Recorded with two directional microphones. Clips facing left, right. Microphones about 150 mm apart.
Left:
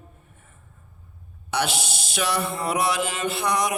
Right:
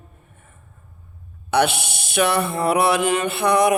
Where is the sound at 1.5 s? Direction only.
60° right (ahead or behind).